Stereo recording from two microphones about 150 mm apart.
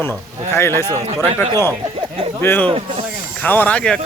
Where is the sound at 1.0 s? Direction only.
45° right (ahead or behind).